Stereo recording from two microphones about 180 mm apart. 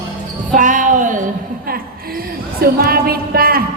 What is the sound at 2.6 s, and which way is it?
A woman's voice, 55° right (ahead or behind).